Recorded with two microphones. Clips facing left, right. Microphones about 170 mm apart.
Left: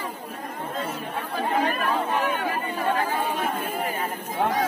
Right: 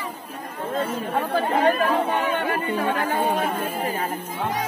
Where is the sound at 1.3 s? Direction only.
65° right (ahead or behind).